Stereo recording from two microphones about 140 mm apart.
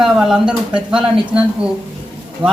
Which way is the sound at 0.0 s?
5° right (ahead or behind).